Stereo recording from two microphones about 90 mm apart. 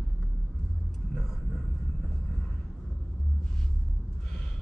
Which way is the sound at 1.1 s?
5° left (ahead or behind).